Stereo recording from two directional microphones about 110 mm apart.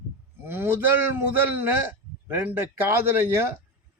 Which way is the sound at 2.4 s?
20° right (ahead or behind).